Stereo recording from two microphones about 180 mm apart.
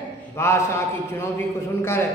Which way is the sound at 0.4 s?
15° left (ahead or behind).